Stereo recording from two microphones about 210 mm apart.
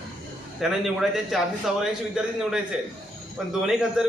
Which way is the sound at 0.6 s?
Centre (ahead or behind).